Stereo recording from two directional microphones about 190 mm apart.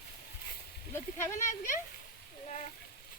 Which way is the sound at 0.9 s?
15° left (ahead or behind).